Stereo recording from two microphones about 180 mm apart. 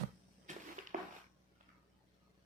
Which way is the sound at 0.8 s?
40° right (ahead or behind).